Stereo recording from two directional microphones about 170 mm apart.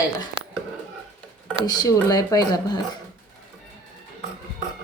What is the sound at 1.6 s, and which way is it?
Speech, 25° left (ahead or behind).